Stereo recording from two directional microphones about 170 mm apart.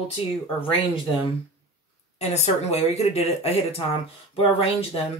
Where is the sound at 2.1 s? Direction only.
40° left (ahead or behind).